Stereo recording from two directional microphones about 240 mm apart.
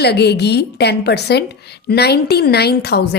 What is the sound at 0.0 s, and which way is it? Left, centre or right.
A woman's voice, left.